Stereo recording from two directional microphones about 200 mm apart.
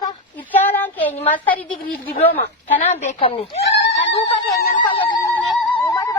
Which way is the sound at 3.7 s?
60° left (ahead or behind).